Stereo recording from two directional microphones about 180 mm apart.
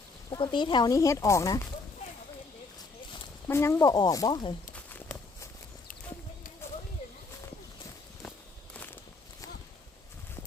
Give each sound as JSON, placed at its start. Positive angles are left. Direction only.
{"t": 0.3, "sound": "speech", "side_deg": 25}
{"t": 3.4, "sound": "speech", "side_deg": 15}
{"t": 4.7, "sound": "walk", "side_deg": 10}
{"t": 8.7, "sound": "walk", "side_deg": 10}